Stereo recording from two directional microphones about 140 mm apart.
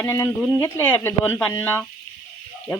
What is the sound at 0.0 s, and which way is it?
Speech, 20° left (ahead or behind).